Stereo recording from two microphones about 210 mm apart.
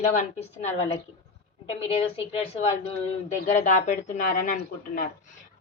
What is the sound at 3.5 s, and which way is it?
Speech, 35° left (ahead or behind).